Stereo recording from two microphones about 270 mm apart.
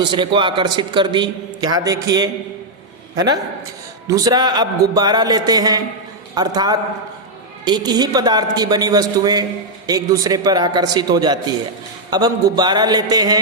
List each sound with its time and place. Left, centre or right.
0.0 s a man's voice: centre
4.0 s a man's voice: centre